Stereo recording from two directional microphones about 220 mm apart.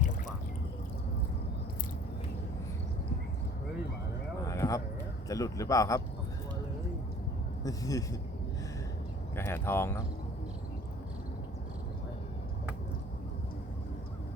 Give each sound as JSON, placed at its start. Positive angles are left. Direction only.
{"t": 4.4, "sound": "a sound", "side_deg": 15}
{"t": 5.3, "sound": "a man's voice", "side_deg": 15}
{"t": 7.6, "sound": "a man's voice", "side_deg": 15}
{"t": 9.3, "sound": "a man's voice", "side_deg": 10}